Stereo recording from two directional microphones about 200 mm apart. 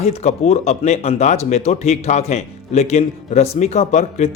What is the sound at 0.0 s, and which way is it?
Speech, 30° left (ahead or behind).